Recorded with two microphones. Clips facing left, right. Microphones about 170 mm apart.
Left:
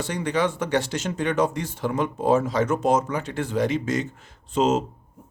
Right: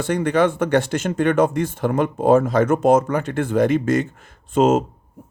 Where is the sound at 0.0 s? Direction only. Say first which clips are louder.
Right 6 dB; 55° right (ahead or behind).